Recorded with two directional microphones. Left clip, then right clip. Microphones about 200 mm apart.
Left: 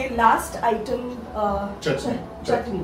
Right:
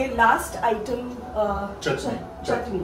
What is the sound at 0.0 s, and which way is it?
A woman's voice, centre (ahead or behind).